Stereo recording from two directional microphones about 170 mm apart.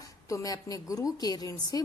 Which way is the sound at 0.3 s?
20° left (ahead or behind).